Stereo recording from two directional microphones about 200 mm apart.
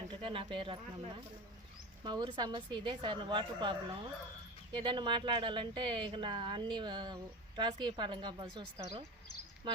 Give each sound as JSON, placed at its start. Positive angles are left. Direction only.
{"t": 0.1, "sound": "speech", "side_deg": -25}
{"t": 2.0, "sound": "speech", "side_deg": -20}